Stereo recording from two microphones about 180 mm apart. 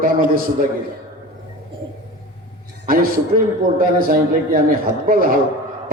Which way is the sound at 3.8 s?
50° right (ahead or behind).